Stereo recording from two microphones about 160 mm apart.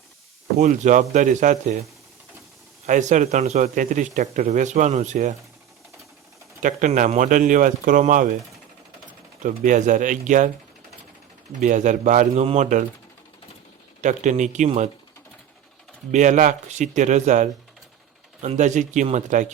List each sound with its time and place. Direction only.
0.6 s a man's voice: 50° right (ahead or behind)
6.6 s speech: 55° right (ahead or behind)
9.4 s a man's voice: 55° right (ahead or behind)
11.6 s a man's voice: 50° right (ahead or behind)
14.0 s a man's voice: 50° right (ahead or behind)
16.1 s a man's voice: 50° right (ahead or behind)